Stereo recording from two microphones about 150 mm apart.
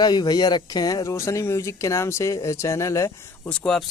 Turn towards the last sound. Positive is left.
turn(degrees=5)  # may be behind; listen again after turning